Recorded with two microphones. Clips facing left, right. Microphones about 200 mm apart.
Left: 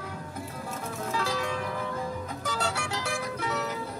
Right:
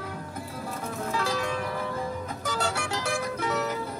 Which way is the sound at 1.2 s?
50° right (ahead or behind).